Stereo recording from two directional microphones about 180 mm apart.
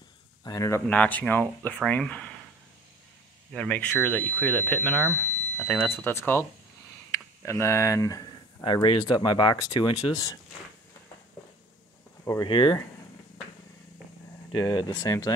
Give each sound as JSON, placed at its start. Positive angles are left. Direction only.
{"t": 0.4, "sound": "speech", "side_deg": 20}
{"t": 3.5, "sound": "speech", "side_deg": 5}
{"t": 12.3, "sound": "speech", "side_deg": 25}
{"t": 14.5, "sound": "speech", "side_deg": 25}